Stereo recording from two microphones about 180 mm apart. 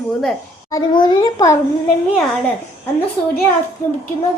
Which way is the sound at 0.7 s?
25° left (ahead or behind).